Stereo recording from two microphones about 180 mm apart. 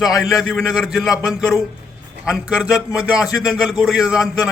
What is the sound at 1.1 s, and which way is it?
Speech, 20° left (ahead or behind).